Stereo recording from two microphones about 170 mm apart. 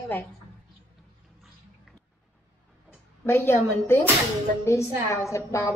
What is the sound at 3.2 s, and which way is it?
Speech, 15° left (ahead or behind).